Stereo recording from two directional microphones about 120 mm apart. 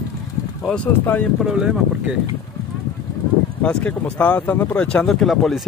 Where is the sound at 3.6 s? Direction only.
10° left (ahead or behind).